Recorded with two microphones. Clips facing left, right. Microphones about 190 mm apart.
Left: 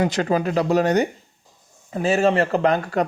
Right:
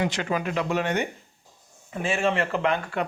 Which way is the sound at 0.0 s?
40° left (ahead or behind).